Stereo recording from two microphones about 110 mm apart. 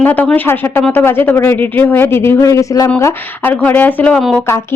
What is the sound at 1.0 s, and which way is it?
Speech, 20° left (ahead or behind).